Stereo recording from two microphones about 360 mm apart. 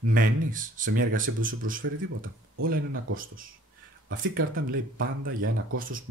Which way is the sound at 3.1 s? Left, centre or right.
Right.